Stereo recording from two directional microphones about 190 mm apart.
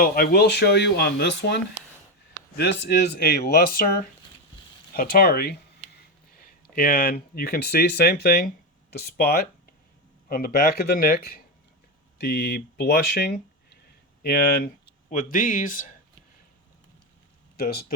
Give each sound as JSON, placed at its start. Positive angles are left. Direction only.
{"t": 0.0, "sound": "speech", "side_deg": 50}